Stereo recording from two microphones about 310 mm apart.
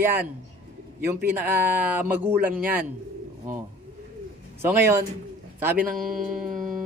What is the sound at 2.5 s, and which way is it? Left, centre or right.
Speech, right.